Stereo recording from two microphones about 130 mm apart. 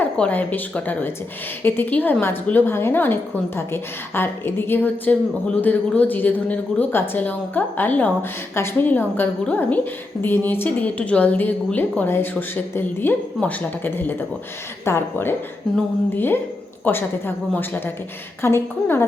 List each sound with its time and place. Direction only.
0.0 s a woman's voice: 10° left (ahead or behind)